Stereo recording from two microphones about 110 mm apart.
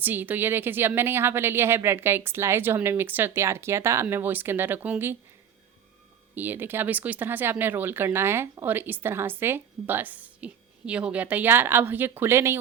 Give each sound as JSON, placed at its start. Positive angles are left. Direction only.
{"t": 0.0, "sound": "a woman's voice", "side_deg": -15}
{"t": 6.3, "sound": "a woman's voice", "side_deg": -15}